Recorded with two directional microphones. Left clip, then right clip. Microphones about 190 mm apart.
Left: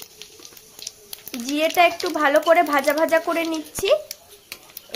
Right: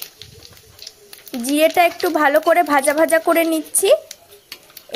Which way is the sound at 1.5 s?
30° right (ahead or behind).